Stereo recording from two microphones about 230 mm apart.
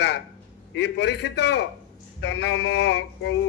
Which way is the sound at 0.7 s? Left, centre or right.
Left.